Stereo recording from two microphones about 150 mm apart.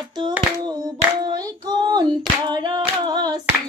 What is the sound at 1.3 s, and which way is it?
Female singing, 30° right (ahead or behind).